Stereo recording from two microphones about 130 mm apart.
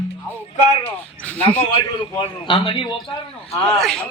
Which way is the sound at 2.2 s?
40° left (ahead or behind).